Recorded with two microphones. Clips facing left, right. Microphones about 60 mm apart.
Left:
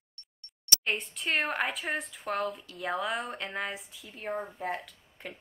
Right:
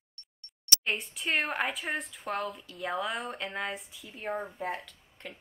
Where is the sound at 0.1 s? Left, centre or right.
Centre.